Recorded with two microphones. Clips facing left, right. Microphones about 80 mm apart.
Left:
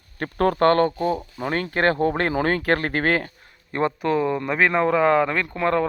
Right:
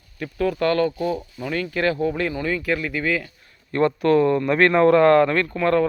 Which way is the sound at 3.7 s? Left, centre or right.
Centre.